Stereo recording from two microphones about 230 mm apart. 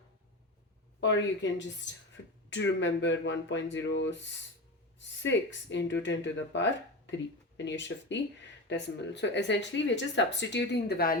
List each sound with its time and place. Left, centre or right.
1.0 s speech: left